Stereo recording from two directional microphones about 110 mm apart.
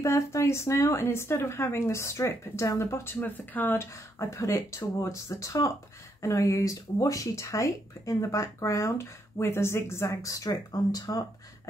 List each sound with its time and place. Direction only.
0.0 s speech: 25° left (ahead or behind)